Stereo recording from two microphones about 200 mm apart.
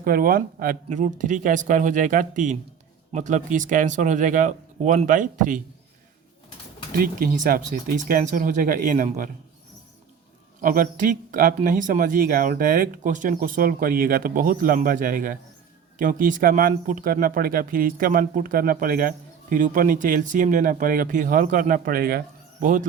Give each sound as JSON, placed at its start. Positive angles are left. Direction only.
{"t": 0.0, "sound": "speech", "side_deg": -45}
{"t": 6.9, "sound": "speech", "side_deg": -45}
{"t": 10.6, "sound": "speech", "side_deg": -40}